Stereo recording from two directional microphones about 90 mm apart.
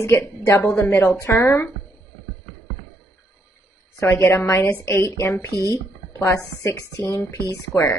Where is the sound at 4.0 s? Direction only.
30° left (ahead or behind).